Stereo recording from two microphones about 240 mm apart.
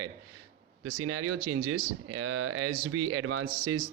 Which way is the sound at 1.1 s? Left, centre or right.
Right.